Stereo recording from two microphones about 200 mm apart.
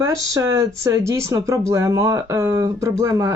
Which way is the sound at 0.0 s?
15° right (ahead or behind).